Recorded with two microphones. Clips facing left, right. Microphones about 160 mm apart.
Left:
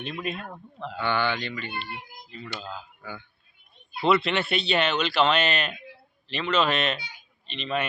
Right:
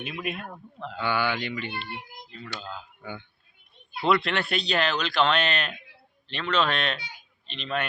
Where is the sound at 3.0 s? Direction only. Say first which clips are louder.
Right 1 dB; 20° right (ahead or behind).